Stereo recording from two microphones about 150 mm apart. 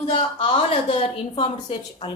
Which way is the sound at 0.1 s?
35° left (ahead or behind).